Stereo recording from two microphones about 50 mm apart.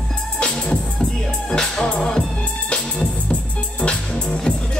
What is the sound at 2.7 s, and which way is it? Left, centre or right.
Music, centre.